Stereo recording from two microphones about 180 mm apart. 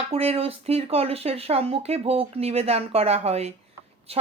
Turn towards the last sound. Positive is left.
turn(degrees=-35)  # may be behind; listen again after turning